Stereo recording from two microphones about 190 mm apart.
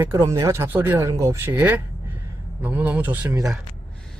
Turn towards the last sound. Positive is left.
turn(degrees=-10)  # may be behind; listen again after turning